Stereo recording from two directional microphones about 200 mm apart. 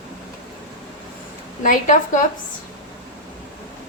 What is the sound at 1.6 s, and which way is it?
Speech, 40° left (ahead or behind).